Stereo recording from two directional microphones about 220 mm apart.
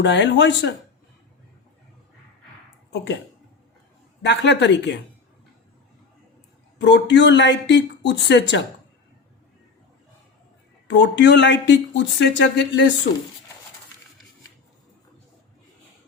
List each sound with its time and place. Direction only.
0.0 s speech: 55° left (ahead or behind)
2.9 s speech: 55° left (ahead or behind)
4.2 s speech: 50° left (ahead or behind)
6.7 s speech: 50° left (ahead or behind)
10.8 s speech: 50° left (ahead or behind)